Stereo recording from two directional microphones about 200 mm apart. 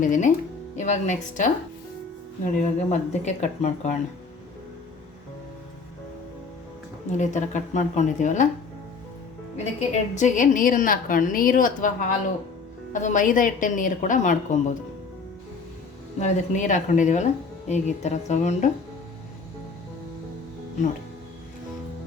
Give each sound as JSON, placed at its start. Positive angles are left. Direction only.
{"t": 0.0, "sound": "a woman's voice", "side_deg": 40}
{"t": 7.1, "sound": "a woman's voice", "side_deg": 35}
{"t": 9.9, "sound": "a woman's voice", "side_deg": 35}
{"t": 16.2, "sound": "a woman's voice", "side_deg": 40}